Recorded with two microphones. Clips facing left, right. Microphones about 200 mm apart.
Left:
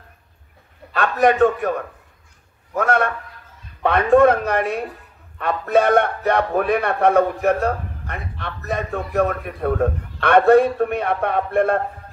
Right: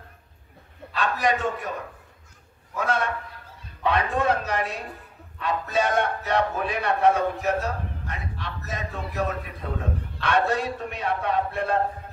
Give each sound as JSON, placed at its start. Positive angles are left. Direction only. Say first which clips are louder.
{"t": 1.2, "sound": "a man's voice", "louder": "left 12 dB", "side_deg": 55}
{"t": 2.7, "sound": "a man's voice", "louder": "left 6 dB", "side_deg": 55}